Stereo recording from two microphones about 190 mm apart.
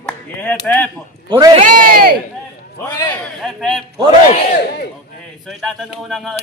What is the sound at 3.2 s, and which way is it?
Speech, centre (ahead or behind).